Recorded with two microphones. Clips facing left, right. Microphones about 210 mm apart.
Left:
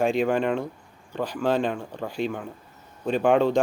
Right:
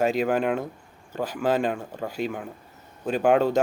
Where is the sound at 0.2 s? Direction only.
5° right (ahead or behind).